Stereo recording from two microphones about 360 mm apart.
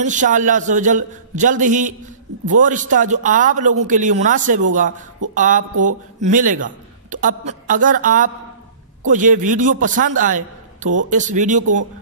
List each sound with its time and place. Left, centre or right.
0.0 s a man's voice: right